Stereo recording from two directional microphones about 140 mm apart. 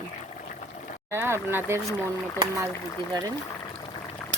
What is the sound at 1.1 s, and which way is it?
Speech, 15° right (ahead or behind).